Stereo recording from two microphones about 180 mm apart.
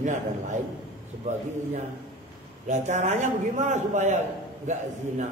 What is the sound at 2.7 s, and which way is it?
A man's voice, 40° right (ahead or behind).